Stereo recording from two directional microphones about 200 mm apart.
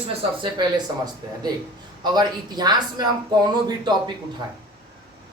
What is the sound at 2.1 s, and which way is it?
Speech, 20° right (ahead or behind).